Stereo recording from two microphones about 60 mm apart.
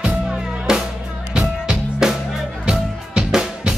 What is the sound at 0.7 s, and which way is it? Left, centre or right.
Music, centre.